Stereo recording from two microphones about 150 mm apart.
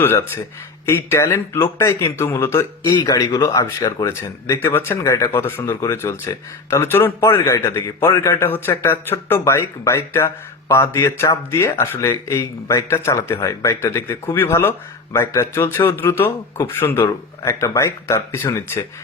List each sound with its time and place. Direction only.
0.0 s speech: 15° left (ahead or behind)